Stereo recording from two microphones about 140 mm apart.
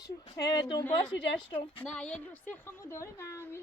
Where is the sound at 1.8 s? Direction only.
5° left (ahead or behind).